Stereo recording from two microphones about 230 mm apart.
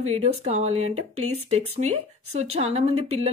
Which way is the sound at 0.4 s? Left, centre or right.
Right.